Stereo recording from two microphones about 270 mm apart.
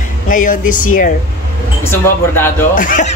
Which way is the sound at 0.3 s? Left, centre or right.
Left.